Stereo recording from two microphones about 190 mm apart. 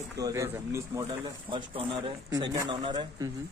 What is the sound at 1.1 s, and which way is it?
Speech, 25° right (ahead or behind).